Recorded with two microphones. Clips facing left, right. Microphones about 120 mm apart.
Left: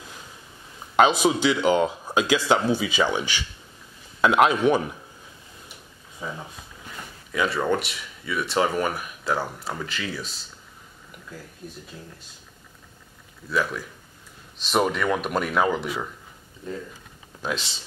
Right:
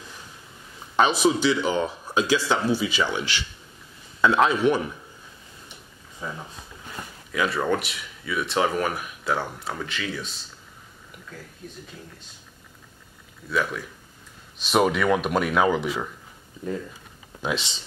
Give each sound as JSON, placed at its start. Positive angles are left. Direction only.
{"t": 1.0, "sound": "speech", "side_deg": 15}
{"t": 4.5, "sound": "speech", "side_deg": 15}
{"t": 6.2, "sound": "speech", "side_deg": 10}
{"t": 13.5, "sound": "speech", "side_deg": 0}
{"t": 17.4, "sound": "speech", "side_deg": 0}